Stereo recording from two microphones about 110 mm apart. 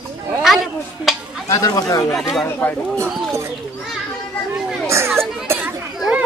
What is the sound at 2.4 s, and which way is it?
Speech, 15° left (ahead or behind).